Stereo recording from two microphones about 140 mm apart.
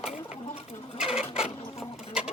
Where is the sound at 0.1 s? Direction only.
50° left (ahead or behind).